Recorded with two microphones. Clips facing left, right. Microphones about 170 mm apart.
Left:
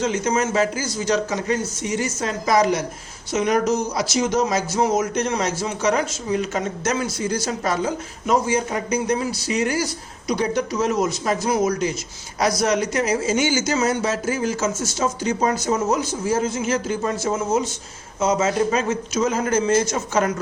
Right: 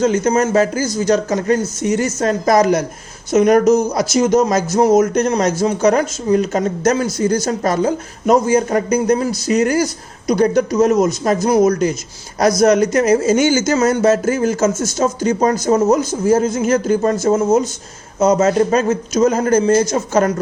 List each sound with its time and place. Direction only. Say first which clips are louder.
0.0 s a man's voice: right 7 dB; 40° right (ahead or behind)